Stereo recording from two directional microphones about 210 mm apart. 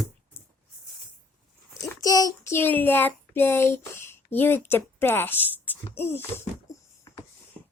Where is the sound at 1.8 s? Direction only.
15° left (ahead or behind).